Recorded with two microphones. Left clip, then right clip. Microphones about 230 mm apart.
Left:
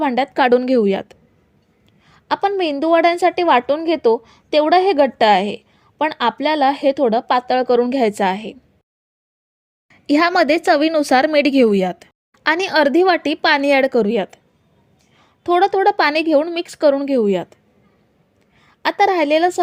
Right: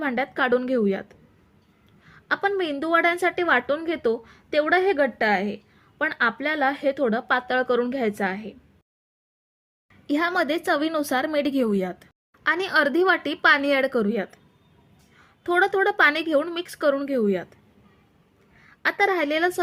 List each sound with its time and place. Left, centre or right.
0.0 s a woman's voice: left
10.1 s a woman's voice: left
18.8 s a woman's voice: left